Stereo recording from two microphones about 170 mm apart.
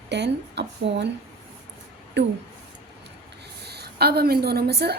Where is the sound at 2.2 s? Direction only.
90° right.